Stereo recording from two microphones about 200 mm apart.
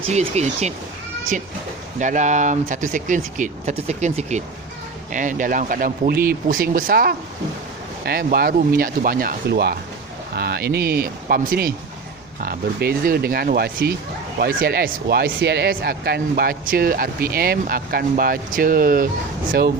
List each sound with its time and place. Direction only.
0.0 s speech: 35° right (ahead or behind)
2.0 s speech: 40° right (ahead or behind)